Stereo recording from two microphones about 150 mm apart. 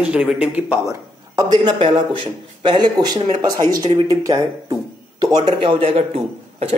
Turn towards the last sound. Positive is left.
turn(degrees=-45)  # may be behind; listen again after turning